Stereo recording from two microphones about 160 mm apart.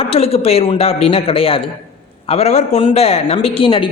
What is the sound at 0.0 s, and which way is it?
Speech, 40° left (ahead or behind).